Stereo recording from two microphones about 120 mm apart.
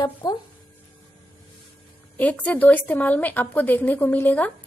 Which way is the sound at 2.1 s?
10° left (ahead or behind).